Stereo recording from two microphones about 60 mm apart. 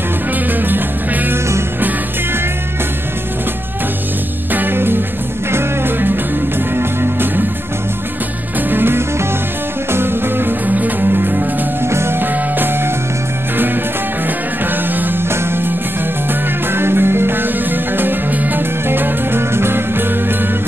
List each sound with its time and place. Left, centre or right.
0.5 s music: right
4.5 s music: right
8.5 s music: right
14.7 s music: right
16.7 s music: right